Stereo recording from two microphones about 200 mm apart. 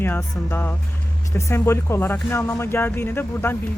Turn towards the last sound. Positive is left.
turn(degrees=10)  # may be behind; listen again after turning